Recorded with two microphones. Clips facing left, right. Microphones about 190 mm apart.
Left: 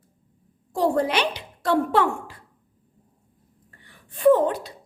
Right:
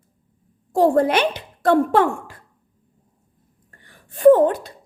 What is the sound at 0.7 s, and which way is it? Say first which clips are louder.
A woman's voice: right 6 dB; 50° right (ahead or behind).